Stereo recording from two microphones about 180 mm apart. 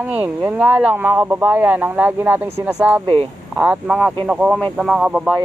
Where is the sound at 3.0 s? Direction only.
30° right (ahead or behind).